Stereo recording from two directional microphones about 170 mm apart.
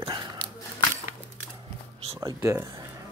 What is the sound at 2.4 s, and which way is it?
Speech, 15° right (ahead or behind).